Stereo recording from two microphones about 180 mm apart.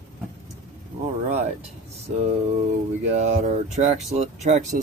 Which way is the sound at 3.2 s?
40° right (ahead or behind).